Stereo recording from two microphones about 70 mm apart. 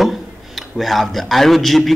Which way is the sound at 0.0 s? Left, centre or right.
Centre.